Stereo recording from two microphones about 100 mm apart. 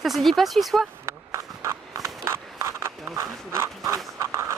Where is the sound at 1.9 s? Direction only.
25° right (ahead or behind).